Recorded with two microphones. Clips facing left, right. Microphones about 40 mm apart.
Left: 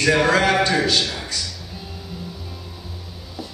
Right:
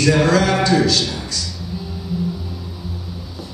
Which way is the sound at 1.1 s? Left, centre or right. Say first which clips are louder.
Right 2 dB; left.